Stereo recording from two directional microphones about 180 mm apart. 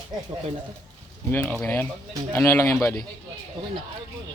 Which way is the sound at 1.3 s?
10° left (ahead or behind).